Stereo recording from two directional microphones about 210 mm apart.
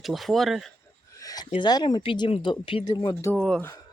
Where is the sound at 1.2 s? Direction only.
15° left (ahead or behind).